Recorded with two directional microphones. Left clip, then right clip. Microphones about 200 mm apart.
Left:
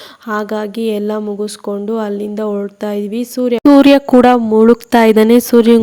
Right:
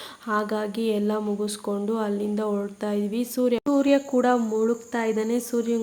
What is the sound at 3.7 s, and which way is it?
Speech, 50° left (ahead or behind).